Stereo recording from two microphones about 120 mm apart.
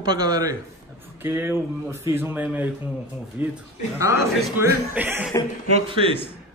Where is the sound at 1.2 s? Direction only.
20° right (ahead or behind).